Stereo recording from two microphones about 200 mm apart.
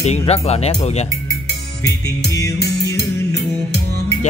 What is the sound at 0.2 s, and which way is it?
Speech, 30° left (ahead or behind).